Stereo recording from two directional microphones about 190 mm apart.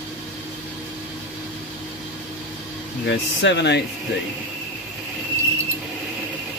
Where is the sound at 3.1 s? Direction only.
65° left (ahead or behind).